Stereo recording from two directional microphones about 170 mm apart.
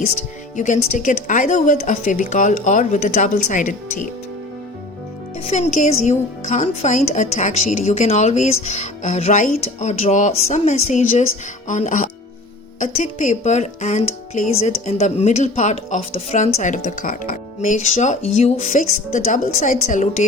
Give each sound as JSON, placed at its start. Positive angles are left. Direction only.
{"t": 0.5, "sound": "speech", "side_deg": 45}
{"t": 5.4, "sound": "a woman's voice", "side_deg": 40}